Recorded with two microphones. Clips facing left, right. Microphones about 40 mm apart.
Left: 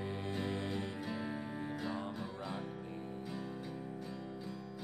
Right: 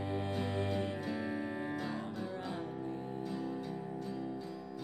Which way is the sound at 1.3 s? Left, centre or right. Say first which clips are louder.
Right 4 dB; right.